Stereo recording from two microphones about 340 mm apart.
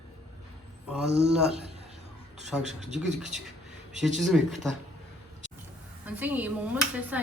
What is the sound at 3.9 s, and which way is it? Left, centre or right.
Speech, centre.